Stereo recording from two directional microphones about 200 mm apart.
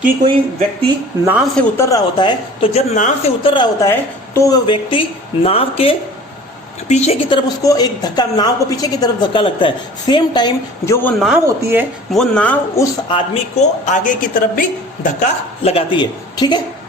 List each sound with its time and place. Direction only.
1.2 s speech: 10° right (ahead or behind)
1.5 s speech: 10° left (ahead or behind)
11.4 s speech: 10° right (ahead or behind)
12.1 s speech: 5° left (ahead or behind); by 16.6 s 20° left (ahead or behind)